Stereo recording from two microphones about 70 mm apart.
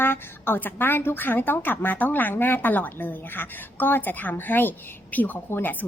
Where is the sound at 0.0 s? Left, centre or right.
Left.